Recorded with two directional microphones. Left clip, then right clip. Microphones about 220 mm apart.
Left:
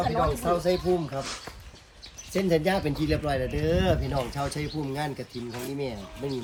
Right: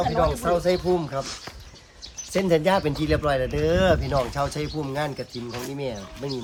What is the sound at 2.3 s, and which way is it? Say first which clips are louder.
Speech: right 4 dB; 5° right (ahead or behind).